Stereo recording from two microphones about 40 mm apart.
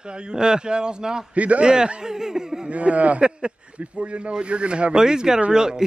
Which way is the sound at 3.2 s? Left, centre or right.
Right.